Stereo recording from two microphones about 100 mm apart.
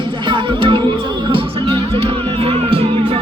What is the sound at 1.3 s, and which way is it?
Music, 70° right (ahead or behind).